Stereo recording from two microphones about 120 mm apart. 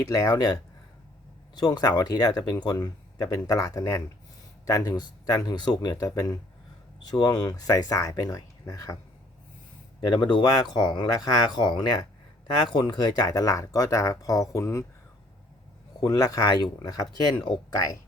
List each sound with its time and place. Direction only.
0.1 s speech: 30° left (ahead or behind)
10.2 s speech: 35° left (ahead or behind)
16.0 s speech: 30° left (ahead or behind)